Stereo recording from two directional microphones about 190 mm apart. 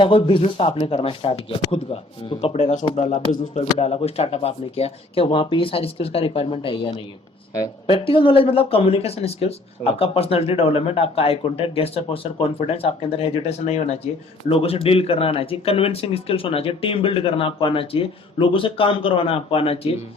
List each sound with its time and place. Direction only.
0.0 s speech: 25° left (ahead or behind)